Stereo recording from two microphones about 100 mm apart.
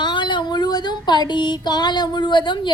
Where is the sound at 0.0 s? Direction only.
50° left (ahead or behind).